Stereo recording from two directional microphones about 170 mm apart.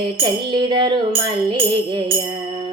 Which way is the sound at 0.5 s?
25° right (ahead or behind).